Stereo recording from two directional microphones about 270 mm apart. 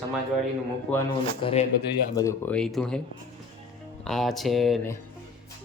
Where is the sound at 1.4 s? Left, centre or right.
Centre.